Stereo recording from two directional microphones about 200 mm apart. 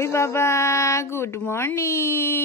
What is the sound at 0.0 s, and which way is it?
Speech, 15° left (ahead or behind).